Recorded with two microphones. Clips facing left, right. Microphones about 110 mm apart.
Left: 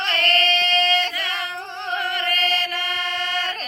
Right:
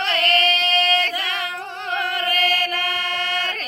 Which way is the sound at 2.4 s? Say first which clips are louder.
Right 4 dB; 10° right (ahead or behind).